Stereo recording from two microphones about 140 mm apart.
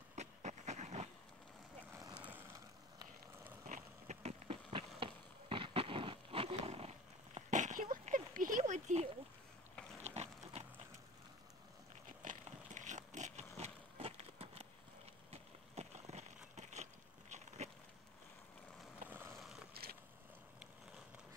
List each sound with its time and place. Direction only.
0.1 s vehicle: 55° right (ahead or behind)
1.9 s vehicle: 20° right (ahead or behind)
2.1 s vehicle: 10° right (ahead or behind)
3.6 s a sound: 70° right (ahead or behind)
4.2 s a sound: 50° right (ahead or behind)
12.1 s pig: 65° right (ahead or behind); by 14.7 s 45° right (ahead or behind)
15.3 s a sound: 50° right (ahead or behind)
19.0 s vehicle: 15° right (ahead or behind)
19.3 s vehicle: centre (ahead or behind)
19.7 s vehicle: 90° right